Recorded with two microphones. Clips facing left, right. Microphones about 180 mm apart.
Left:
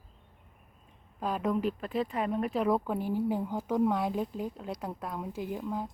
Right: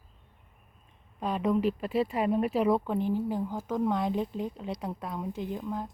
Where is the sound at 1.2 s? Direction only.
Centre (ahead or behind).